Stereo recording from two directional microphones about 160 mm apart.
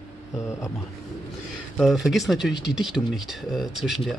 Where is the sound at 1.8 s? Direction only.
Centre (ahead or behind).